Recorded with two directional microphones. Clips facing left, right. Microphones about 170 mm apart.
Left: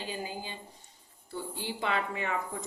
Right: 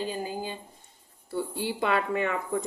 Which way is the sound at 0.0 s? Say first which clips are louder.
Right 6 dB; 45° right (ahead or behind).